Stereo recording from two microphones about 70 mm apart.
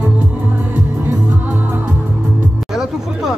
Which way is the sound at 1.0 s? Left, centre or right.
Right.